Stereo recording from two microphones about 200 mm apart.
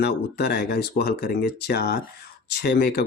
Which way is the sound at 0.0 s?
55° left (ahead or behind).